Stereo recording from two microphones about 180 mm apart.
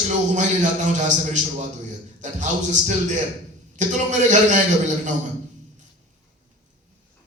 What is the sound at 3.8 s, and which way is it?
Speech, 45° right (ahead or behind).